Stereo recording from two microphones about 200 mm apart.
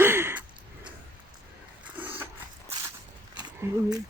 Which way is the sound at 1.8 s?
10° right (ahead or behind).